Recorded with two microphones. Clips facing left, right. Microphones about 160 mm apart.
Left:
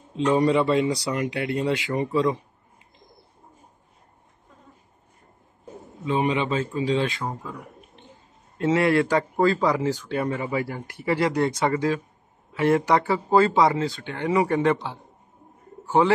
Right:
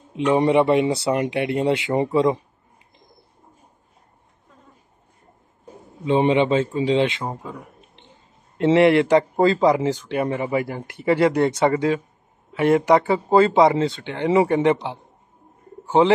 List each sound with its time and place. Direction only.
0.1 s speech: 20° right (ahead or behind)
6.0 s speech: 30° right (ahead or behind)
8.5 s speech: 25° right (ahead or behind)
15.8 s bird: 20° right (ahead or behind)